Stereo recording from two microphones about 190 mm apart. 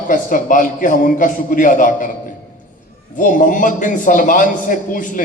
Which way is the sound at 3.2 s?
45° left (ahead or behind).